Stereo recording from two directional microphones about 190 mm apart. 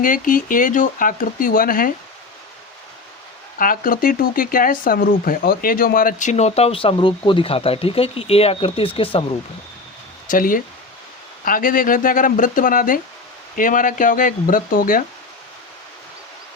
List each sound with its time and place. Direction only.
0.0 s speech: 45° left (ahead or behind)
3.6 s speech: 45° left (ahead or behind); by 9.2 s 30° left (ahead or behind)
10.2 s speech: 45° left (ahead or behind)